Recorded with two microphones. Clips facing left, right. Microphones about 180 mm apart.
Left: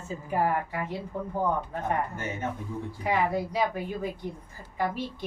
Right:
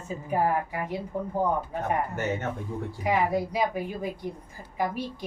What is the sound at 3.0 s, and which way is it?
A woman's voice, 10° right (ahead or behind).